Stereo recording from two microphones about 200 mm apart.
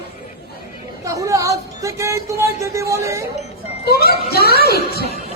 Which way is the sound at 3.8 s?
50° left (ahead or behind).